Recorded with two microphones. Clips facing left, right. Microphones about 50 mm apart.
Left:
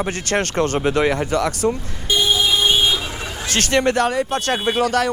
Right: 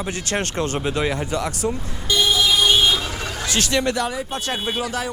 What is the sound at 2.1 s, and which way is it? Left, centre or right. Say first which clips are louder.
Vehicle: left 1 dB; left.